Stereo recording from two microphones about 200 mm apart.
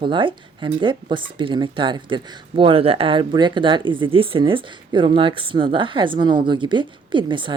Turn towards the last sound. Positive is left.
turn(degrees=-25)  # may be behind; listen again after turning